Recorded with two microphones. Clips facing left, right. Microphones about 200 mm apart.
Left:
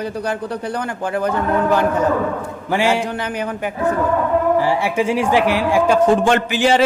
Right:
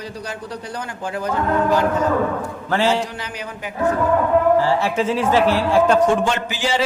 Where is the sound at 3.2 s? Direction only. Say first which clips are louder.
Left 8 dB; 55° left (ahead or behind).